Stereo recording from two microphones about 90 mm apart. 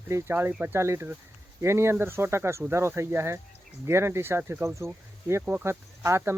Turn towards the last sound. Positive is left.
turn(degrees=-30)  # may be behind; listen again after turning